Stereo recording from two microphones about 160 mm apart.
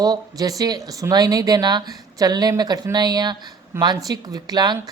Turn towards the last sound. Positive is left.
turn(degrees=-25)  # may be behind; listen again after turning